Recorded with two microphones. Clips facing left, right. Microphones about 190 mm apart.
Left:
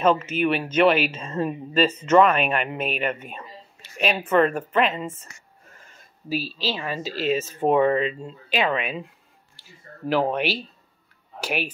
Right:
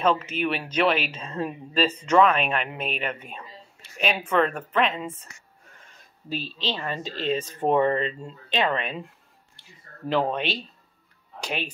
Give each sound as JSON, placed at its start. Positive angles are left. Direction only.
{"t": 0.0, "sound": "speech", "side_deg": 5}